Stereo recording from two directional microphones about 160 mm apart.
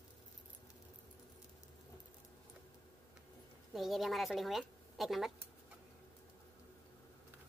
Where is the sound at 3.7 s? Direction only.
Centre (ahead or behind).